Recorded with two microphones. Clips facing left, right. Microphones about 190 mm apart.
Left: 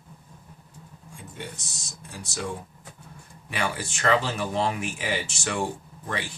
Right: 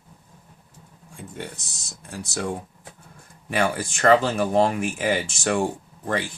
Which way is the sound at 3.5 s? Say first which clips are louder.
Right 6 dB; 45° right (ahead or behind).